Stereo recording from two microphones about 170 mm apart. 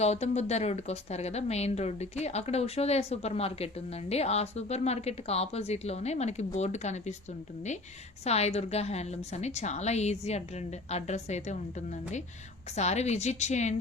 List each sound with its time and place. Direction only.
0.0 s a woman's voice: 40° left (ahead or behind)
8.2 s a woman's voice: 40° left (ahead or behind)